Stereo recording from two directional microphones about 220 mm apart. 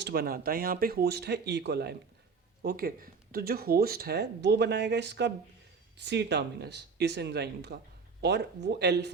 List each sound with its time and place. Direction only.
0.0 s speech: 45° right (ahead or behind)